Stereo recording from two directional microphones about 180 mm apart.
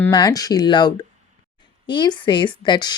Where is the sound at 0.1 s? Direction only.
20° left (ahead or behind).